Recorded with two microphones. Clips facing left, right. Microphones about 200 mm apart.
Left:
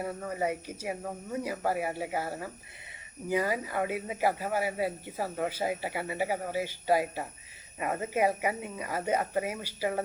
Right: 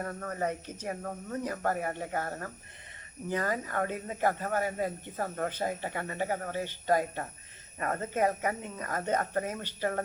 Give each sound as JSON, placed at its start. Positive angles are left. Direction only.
{"t": 0.0, "sound": "speech", "side_deg": 10}